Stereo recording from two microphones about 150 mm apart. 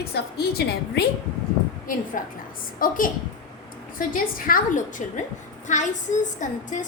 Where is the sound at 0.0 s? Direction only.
90° left.